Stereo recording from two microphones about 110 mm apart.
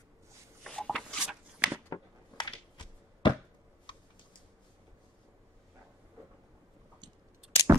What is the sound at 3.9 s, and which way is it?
Typing, 50° left (ahead or behind).